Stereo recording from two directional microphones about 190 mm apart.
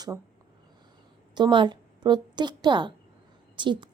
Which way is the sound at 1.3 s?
25° right (ahead or behind).